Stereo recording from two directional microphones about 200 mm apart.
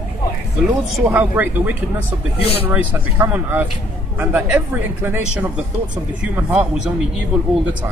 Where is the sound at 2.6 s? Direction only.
10° right (ahead or behind).